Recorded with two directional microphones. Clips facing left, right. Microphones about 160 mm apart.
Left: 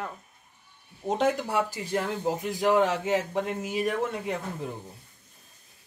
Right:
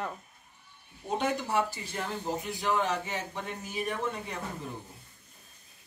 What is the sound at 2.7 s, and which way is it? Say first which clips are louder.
A man's voice: left 7 dB; 90° left.